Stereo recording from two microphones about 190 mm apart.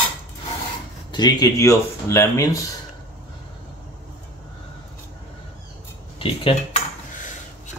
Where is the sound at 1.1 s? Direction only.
20° left (ahead or behind).